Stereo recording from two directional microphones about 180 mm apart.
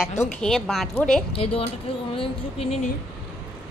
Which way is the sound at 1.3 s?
30° left (ahead or behind).